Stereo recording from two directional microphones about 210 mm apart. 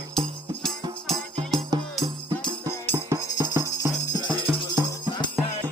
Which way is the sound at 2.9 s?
15° right (ahead or behind).